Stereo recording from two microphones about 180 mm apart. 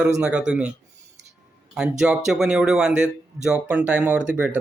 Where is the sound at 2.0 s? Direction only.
5° right (ahead or behind).